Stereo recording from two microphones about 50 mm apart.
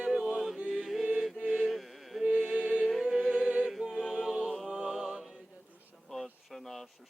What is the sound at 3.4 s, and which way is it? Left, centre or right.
A capella, centre.